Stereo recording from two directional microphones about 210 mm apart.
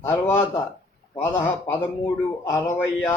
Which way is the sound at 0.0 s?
10° left (ahead or behind).